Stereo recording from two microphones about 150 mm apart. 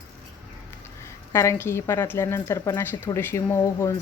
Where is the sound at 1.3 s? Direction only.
15° left (ahead or behind).